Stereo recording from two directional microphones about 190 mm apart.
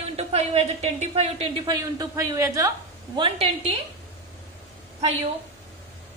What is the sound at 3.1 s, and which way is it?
Speech, 30° right (ahead or behind).